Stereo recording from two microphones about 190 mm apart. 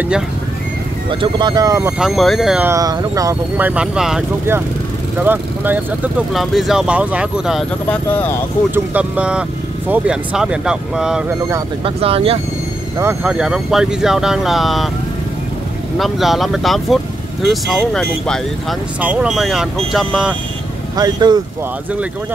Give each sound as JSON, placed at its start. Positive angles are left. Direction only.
{"t": 1.2, "sound": "speech", "side_deg": -20}
{"t": 2.0, "sound": "speech", "side_deg": 0}
{"t": 2.7, "sound": "speech", "side_deg": -20}
{"t": 7.9, "sound": "speech", "side_deg": 10}
{"t": 8.7, "sound": "speech", "side_deg": -10}
{"t": 11.8, "sound": "speech", "side_deg": -30}
{"t": 13.0, "sound": "speech", "side_deg": -5}
{"t": 16.0, "sound": "speech", "side_deg": 0}
{"t": 20.9, "sound": "speech", "side_deg": -20}